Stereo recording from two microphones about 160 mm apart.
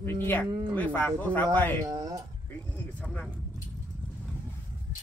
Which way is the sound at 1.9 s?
25° right (ahead or behind).